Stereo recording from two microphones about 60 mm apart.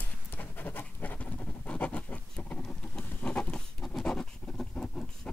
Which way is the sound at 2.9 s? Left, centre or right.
Left.